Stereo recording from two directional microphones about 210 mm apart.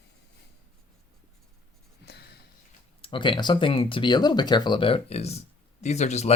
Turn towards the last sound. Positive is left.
turn(degrees=30)  # may be behind; listen again after turning